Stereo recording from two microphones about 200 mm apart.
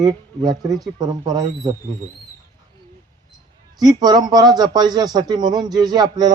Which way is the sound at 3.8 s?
20° right (ahead or behind).